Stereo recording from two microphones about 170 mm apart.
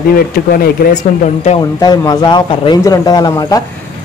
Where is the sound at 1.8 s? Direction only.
25° left (ahead or behind).